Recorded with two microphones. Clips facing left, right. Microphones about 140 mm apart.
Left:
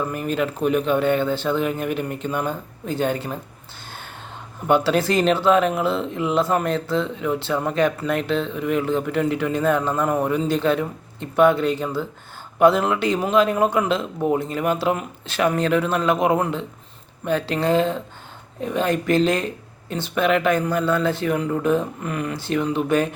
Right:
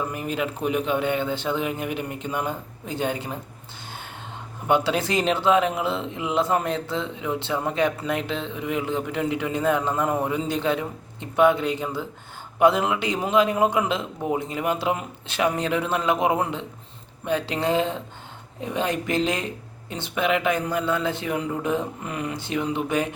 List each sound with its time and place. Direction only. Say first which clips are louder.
0.1 s speech: left 4 dB; 15° right (ahead or behind)
4.7 s speech: left 4 dB; 20° right (ahead or behind)